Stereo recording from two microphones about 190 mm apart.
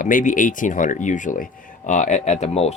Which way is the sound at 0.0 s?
45° left (ahead or behind).